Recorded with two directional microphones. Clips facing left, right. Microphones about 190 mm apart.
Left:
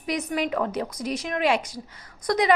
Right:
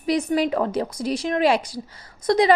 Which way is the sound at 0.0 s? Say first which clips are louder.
Right 6 dB; 30° right (ahead or behind).